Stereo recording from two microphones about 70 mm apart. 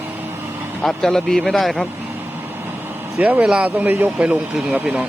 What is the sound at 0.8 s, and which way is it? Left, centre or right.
Speech, centre.